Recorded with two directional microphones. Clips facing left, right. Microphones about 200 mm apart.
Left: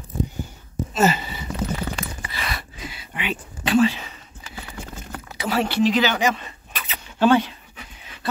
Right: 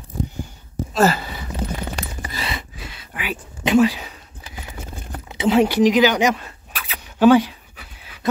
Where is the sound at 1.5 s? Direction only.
40° right (ahead or behind).